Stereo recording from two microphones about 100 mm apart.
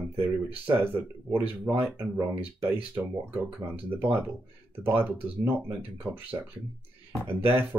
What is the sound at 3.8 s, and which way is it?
Speech, 15° right (ahead or behind).